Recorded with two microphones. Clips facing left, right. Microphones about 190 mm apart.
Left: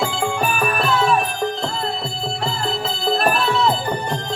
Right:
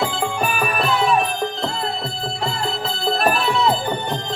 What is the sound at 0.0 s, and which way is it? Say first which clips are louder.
Music: left 1 dB; centre (ahead or behind).